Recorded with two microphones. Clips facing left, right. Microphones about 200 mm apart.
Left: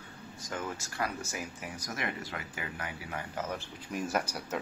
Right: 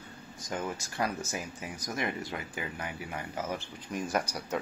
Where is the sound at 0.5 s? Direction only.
20° right (ahead or behind).